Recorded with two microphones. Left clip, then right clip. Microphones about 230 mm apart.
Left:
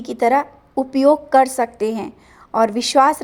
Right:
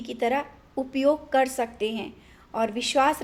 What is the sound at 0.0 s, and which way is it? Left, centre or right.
A woman's voice, left.